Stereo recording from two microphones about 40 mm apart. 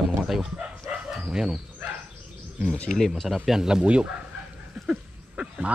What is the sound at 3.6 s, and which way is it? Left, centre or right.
Speech, centre.